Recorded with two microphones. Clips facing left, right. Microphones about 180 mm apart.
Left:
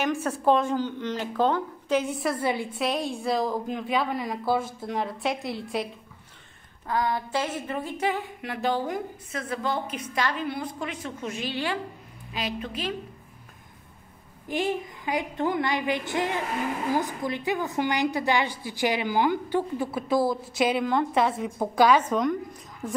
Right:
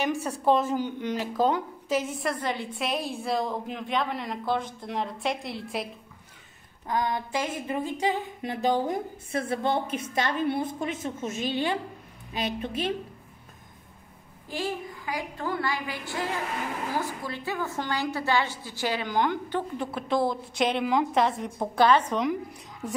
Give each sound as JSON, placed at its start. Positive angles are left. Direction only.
{"t": 0.0, "sound": "speech", "side_deg": 0}
{"t": 6.9, "sound": "a woman's voice", "side_deg": -20}
{"t": 14.5, "sound": "a woman's voice", "side_deg": 20}
{"t": 20.8, "sound": "speech", "side_deg": -5}